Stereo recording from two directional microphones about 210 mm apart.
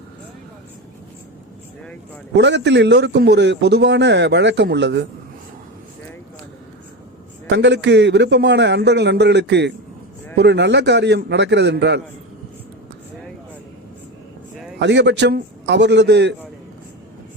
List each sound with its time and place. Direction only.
2.3 s a man's voice: 55° right (ahead or behind)
7.4 s a man's voice: 55° right (ahead or behind)
14.8 s a man's voice: 55° right (ahead or behind)